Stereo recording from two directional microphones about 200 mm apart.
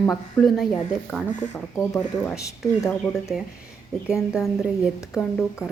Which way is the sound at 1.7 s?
15° left (ahead or behind).